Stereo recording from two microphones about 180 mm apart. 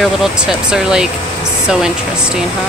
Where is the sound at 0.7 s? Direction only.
5° right (ahead or behind).